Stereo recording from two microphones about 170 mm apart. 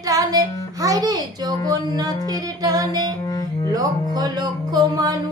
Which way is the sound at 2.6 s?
20° right (ahead or behind).